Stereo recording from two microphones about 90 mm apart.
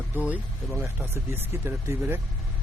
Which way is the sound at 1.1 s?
25° right (ahead or behind).